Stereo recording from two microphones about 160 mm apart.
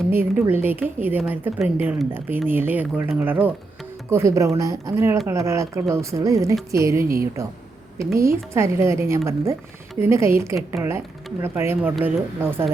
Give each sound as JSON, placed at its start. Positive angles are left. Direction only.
{"t": 0.1, "sound": "a woman's voice", "side_deg": -15}
{"t": 7.0, "sound": "a woman's voice", "side_deg": -65}
{"t": 7.9, "sound": "a woman's voice", "side_deg": -20}